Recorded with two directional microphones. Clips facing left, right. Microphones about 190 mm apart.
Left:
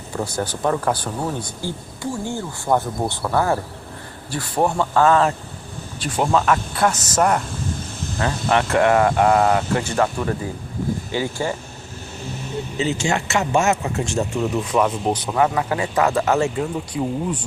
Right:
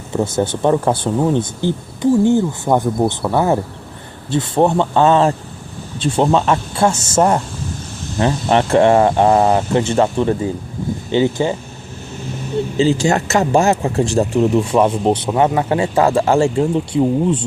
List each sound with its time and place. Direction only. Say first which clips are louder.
0.2 s speech: right 7 dB; 25° right (ahead or behind)
12.7 s speech: right 7 dB; 30° right (ahead or behind)